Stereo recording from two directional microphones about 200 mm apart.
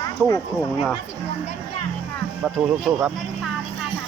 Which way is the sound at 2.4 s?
5° right (ahead or behind).